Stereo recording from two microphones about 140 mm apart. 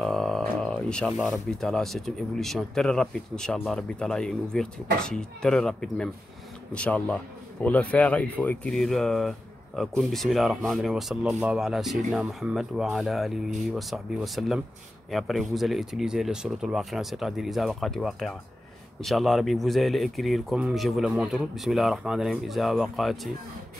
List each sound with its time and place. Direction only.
0.0 s speech: 5° left (ahead or behind)